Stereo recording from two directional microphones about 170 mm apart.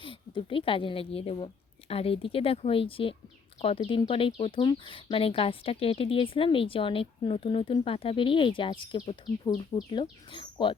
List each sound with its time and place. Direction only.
0.0 s speech: 30° left (ahead or behind)